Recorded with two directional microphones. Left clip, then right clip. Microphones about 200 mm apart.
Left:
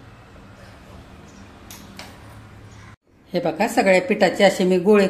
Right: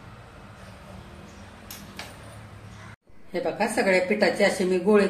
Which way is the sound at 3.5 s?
40° left (ahead or behind).